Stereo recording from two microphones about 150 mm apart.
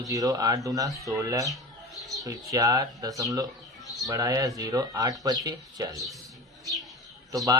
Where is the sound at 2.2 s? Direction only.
25° right (ahead or behind).